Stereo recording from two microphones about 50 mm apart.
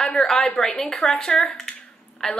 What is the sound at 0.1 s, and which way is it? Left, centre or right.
A woman's voice, centre.